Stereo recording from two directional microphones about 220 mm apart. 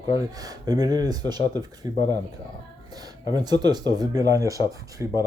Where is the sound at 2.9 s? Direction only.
15° right (ahead or behind).